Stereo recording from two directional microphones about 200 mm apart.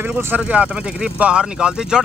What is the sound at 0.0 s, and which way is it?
Speech, 5° right (ahead or behind).